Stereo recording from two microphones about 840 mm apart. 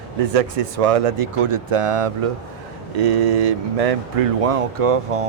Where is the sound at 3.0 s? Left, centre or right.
Right.